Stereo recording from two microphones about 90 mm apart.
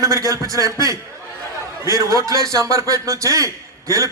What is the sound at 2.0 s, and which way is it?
A man's voice, 40° right (ahead or behind).